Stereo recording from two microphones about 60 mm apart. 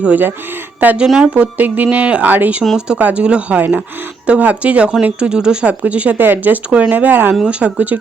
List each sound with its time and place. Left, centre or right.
0.0 s speech: right
0.9 s speech: centre
1.3 s speech: right
2.7 s speech: centre